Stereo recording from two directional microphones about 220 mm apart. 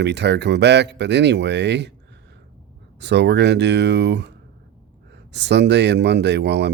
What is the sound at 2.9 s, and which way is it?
Speech, 50° right (ahead or behind).